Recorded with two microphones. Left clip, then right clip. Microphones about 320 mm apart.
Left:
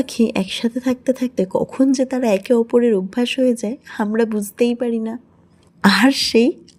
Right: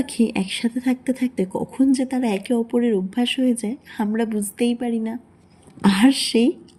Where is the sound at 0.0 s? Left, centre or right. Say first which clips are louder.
Left 4 dB; left.